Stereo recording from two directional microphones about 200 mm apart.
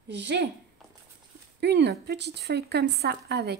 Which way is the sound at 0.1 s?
65° right (ahead or behind).